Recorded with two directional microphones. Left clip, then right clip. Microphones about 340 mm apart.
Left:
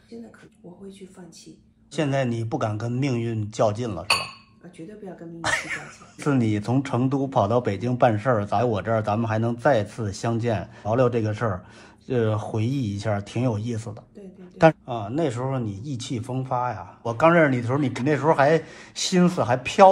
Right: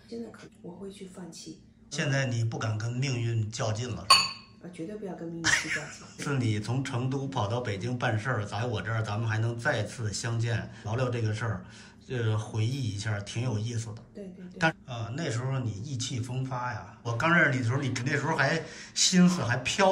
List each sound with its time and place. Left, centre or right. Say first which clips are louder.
1.9 s speech: left 6 dB; centre
5.4 s speech: left 1 dB; centre